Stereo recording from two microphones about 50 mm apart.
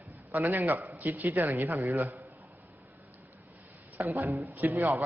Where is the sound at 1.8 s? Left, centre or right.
Right.